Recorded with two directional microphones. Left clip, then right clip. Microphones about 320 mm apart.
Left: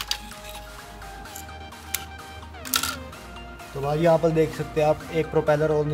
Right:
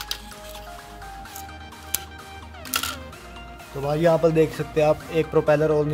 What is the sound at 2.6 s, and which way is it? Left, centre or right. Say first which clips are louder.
Music: left 1 dB; centre.